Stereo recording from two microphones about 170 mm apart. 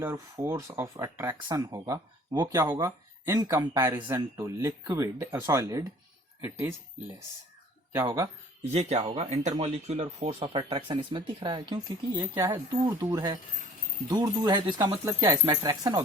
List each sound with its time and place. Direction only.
0.0 s speech: 15° right (ahead or behind)
7.9 s speech: 15° right (ahead or behind)
8.7 s speech: 40° right (ahead or behind); by 16.0 s 25° right (ahead or behind)